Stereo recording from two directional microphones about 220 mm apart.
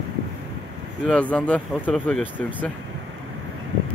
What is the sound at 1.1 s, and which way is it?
Speech, 5° left (ahead or behind).